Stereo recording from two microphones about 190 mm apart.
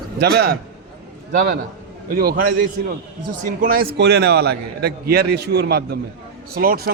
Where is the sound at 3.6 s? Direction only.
50° right (ahead or behind).